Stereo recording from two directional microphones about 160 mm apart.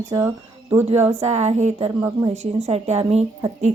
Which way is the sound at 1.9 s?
15° right (ahead or behind).